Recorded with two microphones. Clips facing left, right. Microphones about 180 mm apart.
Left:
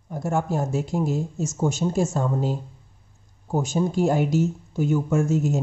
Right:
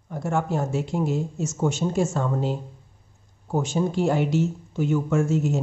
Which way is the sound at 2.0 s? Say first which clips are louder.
Even; 15° left (ahead or behind).